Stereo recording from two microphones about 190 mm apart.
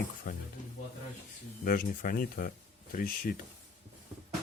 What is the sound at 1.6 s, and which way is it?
Speech, 45° left (ahead or behind).